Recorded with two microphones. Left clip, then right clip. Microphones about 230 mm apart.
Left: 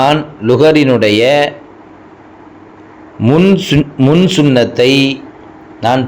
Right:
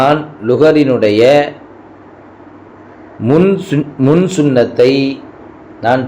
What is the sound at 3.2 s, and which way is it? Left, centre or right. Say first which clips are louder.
A man's voice: left 1 dB; left.